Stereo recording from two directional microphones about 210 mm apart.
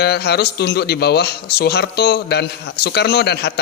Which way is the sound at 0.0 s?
50° left (ahead or behind).